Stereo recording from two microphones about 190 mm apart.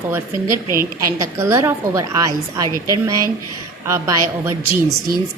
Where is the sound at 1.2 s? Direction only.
15° right (ahead or behind).